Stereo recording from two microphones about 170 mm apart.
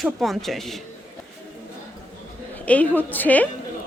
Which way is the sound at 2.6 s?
10° left (ahead or behind).